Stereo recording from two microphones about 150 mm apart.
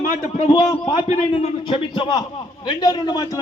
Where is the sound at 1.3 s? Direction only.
35° left (ahead or behind).